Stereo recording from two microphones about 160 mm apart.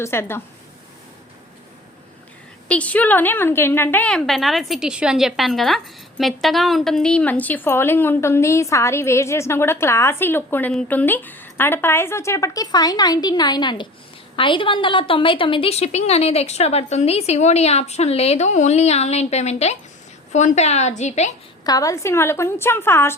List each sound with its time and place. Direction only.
0.0 s a woman's voice: 15° left (ahead or behind)
2.6 s a woman's voice: 10° left (ahead or behind); by 21.3 s 45° left (ahead or behind)
21.6 s a woman's voice: 25° left (ahead or behind)